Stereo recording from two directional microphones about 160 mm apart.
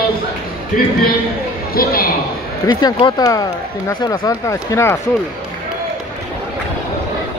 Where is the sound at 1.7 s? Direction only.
65° left (ahead or behind).